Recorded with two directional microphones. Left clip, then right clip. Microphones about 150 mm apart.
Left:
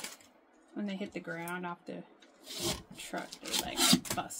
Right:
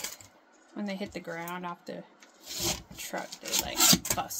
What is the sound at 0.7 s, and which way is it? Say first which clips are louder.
Speech: right 3 dB; 25° left (ahead or behind).